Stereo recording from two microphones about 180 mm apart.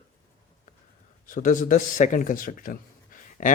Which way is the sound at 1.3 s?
45° left (ahead or behind).